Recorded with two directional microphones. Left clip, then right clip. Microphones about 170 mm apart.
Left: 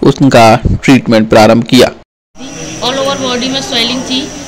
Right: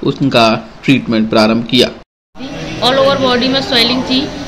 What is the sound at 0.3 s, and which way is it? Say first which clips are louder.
A man's voice: left 5 dB; 90° left.